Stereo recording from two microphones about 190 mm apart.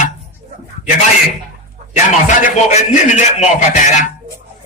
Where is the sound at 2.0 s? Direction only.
40° left (ahead or behind).